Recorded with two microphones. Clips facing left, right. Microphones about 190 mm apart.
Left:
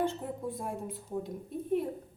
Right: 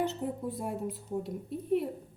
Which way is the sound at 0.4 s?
5° right (ahead or behind).